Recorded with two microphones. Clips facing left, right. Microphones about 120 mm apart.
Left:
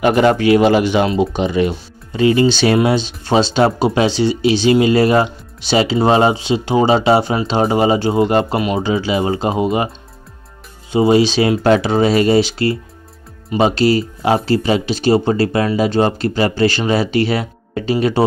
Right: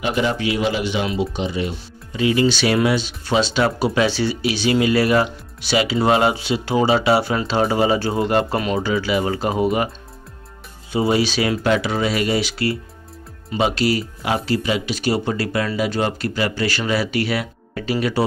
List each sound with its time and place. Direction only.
0.0 s speech: 55° left (ahead or behind)
2.1 s speech: 35° left (ahead or behind)
8.5 s speech: 10° left (ahead or behind)
8.8 s speech: 25° left (ahead or behind)
10.9 s speech: 25° left (ahead or behind)